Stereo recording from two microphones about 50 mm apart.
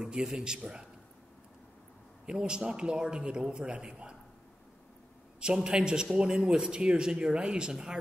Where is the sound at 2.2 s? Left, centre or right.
Centre.